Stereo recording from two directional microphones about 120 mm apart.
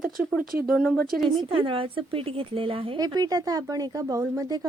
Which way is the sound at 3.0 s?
30° right (ahead or behind).